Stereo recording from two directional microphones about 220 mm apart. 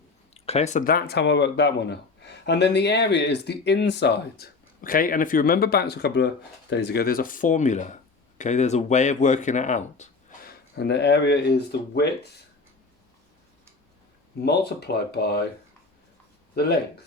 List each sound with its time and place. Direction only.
0.3 s speech: 30° left (ahead or behind); by 12.4 s 50° left (ahead or behind)
14.4 s speech: 45° left (ahead or behind)